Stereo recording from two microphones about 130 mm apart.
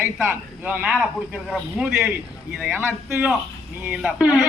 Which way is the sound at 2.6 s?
10° right (ahead or behind).